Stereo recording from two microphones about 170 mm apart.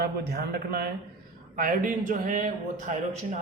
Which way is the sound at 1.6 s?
50° right (ahead or behind).